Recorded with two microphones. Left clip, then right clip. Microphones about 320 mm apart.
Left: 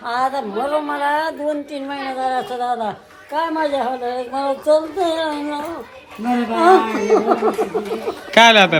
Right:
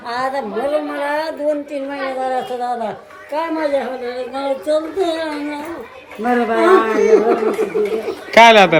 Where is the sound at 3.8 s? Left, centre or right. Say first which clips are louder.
Left 1 dB; centre.